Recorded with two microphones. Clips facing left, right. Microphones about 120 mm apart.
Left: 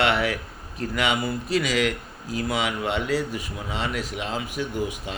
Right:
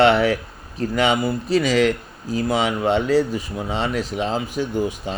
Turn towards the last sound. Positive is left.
turn(degrees=-30)  # may be behind; listen again after turning